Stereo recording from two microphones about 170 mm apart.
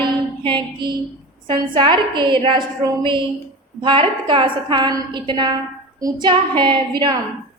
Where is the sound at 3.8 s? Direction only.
30° right (ahead or behind).